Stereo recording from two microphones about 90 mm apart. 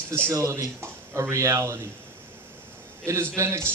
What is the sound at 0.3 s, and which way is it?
A man's voice, 35° right (ahead or behind).